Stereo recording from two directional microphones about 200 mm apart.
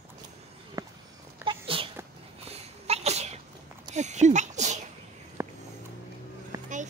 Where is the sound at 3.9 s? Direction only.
35° right (ahead or behind).